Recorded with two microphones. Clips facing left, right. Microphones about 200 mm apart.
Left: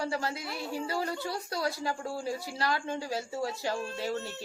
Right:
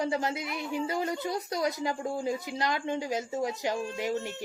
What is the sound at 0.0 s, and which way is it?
A woman's voice, 20° right (ahead or behind).